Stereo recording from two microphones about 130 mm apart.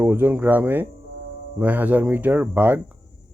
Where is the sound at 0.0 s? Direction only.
15° right (ahead or behind).